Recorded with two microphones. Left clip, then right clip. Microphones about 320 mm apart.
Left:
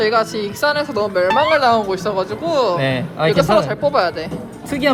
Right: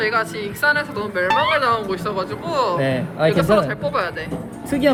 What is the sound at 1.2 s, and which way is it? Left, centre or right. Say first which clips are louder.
Speech: left 2 dB; centre.